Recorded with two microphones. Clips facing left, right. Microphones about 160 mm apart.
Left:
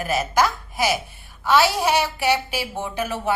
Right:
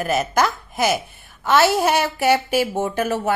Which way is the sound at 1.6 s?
50° right (ahead or behind).